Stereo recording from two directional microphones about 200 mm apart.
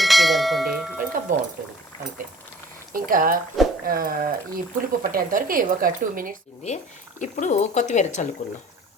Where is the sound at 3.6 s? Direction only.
Centre (ahead or behind).